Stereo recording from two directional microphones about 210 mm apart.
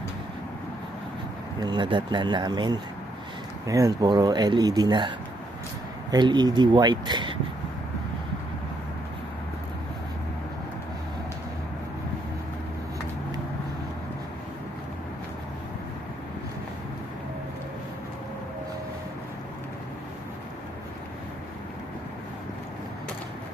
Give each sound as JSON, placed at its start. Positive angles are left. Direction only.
{"t": 1.6, "sound": "speech", "side_deg": -20}